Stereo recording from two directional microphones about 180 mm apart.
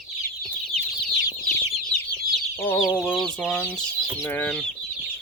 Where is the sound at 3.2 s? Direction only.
5° left (ahead or behind).